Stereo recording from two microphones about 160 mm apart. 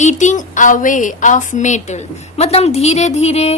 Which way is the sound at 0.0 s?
50° left (ahead or behind).